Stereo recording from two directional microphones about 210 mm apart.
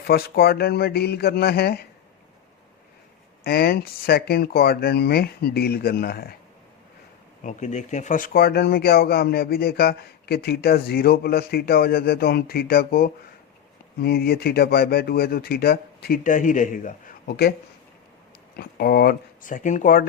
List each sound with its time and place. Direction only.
0.1 s speech: 50° left (ahead or behind)
3.4 s speech: 50° left (ahead or behind)
7.4 s speech: 35° left (ahead or behind)
18.5 s speech: 45° left (ahead or behind)